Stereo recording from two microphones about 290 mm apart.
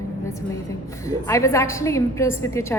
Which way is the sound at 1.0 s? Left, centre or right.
Centre.